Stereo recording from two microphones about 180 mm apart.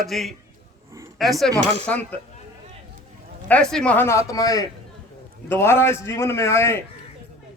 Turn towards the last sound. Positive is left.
turn(degrees=15)  # may be behind; listen again after turning